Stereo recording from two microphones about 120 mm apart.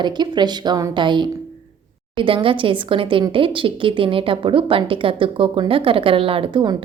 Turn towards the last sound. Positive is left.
turn(degrees=-40)  # may be behind; listen again after turning